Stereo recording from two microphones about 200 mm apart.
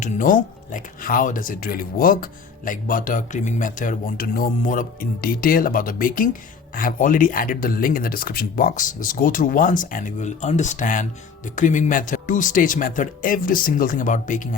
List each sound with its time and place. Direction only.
0.0 s speech: 40° left (ahead or behind)